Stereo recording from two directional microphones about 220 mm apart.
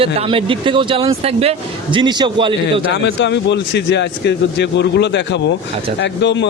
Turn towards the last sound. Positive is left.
turn(degrees=55)  # may be behind; listen again after turning